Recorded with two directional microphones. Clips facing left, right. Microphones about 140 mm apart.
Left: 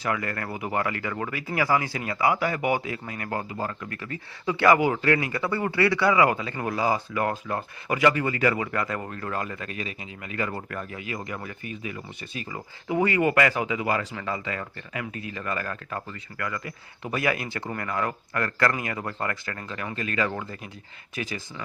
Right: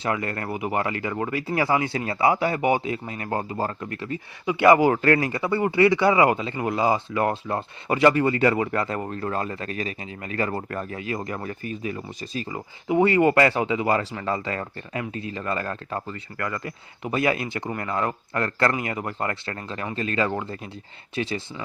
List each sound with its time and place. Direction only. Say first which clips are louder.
0.0 s speech: right 2 dB; 25° right (ahead or behind)
4.8 s speech: right 4 dB; 45° right (ahead or behind)
5.3 s speech: right 4 dB; 20° right (ahead or behind)
17.0 s speech: right 3 dB; 25° right (ahead or behind)